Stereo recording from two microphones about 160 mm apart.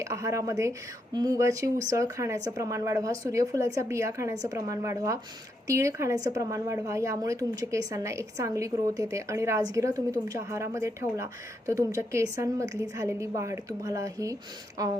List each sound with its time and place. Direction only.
0.0 s a woman's voice: 20° right (ahead or behind)